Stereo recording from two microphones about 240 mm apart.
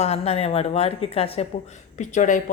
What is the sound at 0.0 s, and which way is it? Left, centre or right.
A woman's voice, left.